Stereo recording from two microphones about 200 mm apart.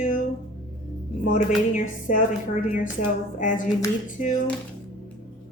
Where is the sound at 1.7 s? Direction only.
40° left (ahead or behind).